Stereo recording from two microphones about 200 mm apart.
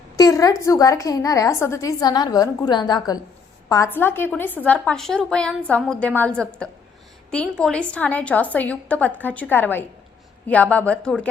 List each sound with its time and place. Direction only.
0.2 s a woman's voice: 15° left (ahead or behind)